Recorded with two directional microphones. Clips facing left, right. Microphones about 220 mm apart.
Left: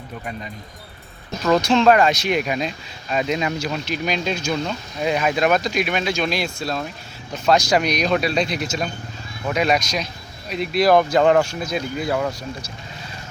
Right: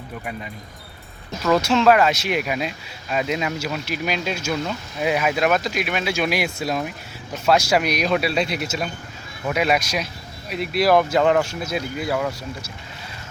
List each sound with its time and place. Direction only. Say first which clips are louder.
1.4 s speech: left 1 dB; 5° right (ahead or behind)
11.2 s speech: left 2 dB; 40° left (ahead or behind)
11.6 s speech: left 1 dB; 5° right (ahead or behind)